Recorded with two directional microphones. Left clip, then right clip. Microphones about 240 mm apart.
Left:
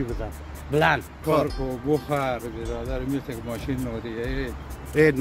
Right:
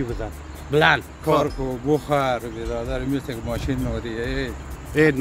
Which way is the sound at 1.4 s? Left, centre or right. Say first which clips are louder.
Right 3 dB; right.